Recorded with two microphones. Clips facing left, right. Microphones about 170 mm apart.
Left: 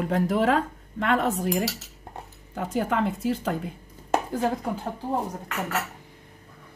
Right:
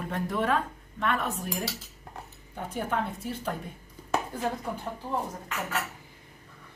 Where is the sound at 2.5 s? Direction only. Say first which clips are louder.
Left 5 dB; 90° left.